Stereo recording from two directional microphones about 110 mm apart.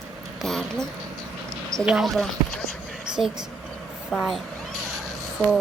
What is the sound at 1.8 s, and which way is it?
Speech, 5° right (ahead or behind).